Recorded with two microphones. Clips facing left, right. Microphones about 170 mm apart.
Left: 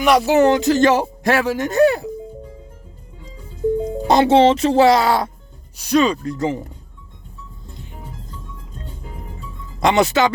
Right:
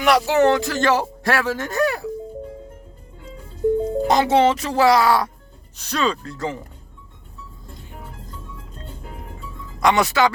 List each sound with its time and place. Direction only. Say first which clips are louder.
0.0 s speech: left 3 dB; 20° left (ahead or behind)
4.0 s speech: left 5 dB; 30° left (ahead or behind)
5.7 s speech: left 7 dB; 15° left (ahead or behind)
9.8 s speech: left 2 dB; 25° left (ahead or behind)